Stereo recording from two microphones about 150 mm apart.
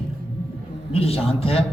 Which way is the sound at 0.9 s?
40° left (ahead or behind).